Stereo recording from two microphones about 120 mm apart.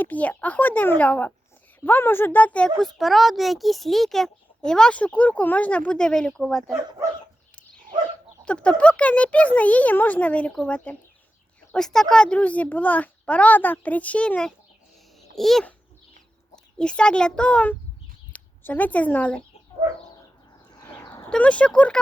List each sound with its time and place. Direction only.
0.0 s speech: 15° left (ahead or behind)
8.4 s a child's voice: 10° left (ahead or behind)
16.7 s speech: 10° left (ahead or behind)
21.0 s a sound: 30° left (ahead or behind)
21.2 s speech: 10° left (ahead or behind)